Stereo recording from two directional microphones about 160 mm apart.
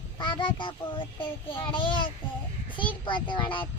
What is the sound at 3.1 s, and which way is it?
Speech, 30° left (ahead or behind).